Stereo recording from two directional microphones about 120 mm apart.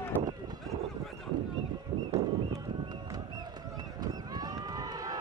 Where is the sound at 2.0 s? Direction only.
25° right (ahead or behind).